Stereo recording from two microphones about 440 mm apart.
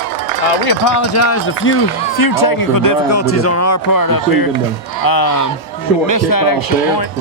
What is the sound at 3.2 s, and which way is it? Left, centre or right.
Speech, left.